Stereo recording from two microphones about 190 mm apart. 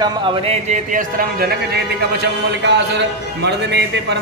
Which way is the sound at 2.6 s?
65° right (ahead or behind).